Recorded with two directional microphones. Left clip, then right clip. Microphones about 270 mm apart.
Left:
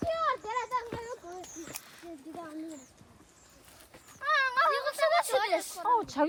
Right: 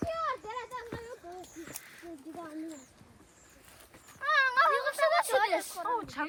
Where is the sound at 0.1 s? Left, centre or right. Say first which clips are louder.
Left 7 dB; left.